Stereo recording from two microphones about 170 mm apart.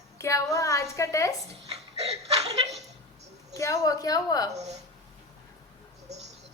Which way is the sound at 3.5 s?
20° left (ahead or behind).